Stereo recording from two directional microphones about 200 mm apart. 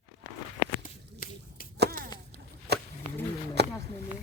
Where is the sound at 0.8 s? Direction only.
45° left (ahead or behind).